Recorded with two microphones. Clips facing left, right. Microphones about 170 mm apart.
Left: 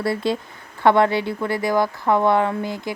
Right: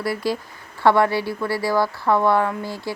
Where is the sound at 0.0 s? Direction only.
25° left (ahead or behind).